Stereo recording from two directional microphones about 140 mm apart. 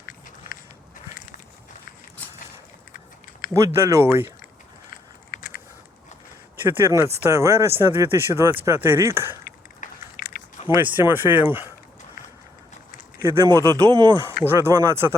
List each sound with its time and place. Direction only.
0.5 s walk: 90° left
3.5 s speech: 20° right (ahead or behind)
6.7 s speech: 20° right (ahead or behind)
9.4 s a sound: 90° left
10.8 s speech: 15° right (ahead or behind)
13.2 s speech: 20° right (ahead or behind)
14.4 s speech: 15° right (ahead or behind)